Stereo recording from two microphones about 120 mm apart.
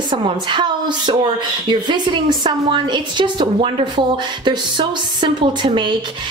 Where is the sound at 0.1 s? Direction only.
40° right (ahead or behind).